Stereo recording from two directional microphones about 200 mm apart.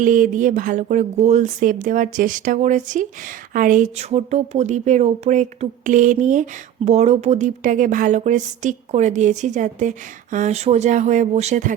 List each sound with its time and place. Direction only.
0.0 s speech: 40° right (ahead or behind)